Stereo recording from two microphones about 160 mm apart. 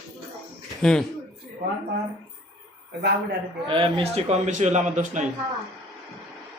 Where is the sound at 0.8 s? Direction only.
5° left (ahead or behind).